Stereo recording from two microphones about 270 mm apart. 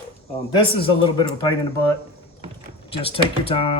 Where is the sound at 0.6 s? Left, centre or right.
Centre.